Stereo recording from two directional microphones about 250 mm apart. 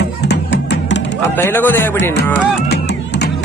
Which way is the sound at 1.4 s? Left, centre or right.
Centre.